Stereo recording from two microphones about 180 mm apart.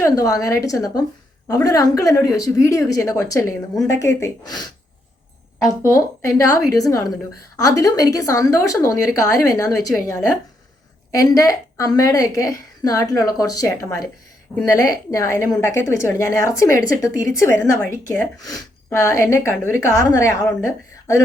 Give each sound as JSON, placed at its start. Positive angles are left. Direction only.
{"t": 0.0, "sound": "a woman's voice", "side_deg": 20}